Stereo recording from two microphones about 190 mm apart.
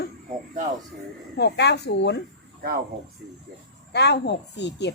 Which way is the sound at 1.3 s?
60° left (ahead or behind).